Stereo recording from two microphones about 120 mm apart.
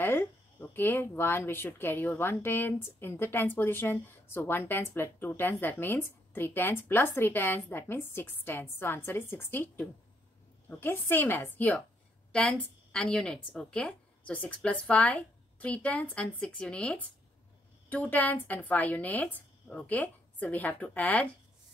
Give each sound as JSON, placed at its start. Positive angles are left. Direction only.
{"t": 0.0, "sound": "a woman's voice", "side_deg": 15}